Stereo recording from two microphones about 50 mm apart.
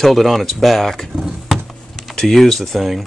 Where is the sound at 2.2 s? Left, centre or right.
Centre.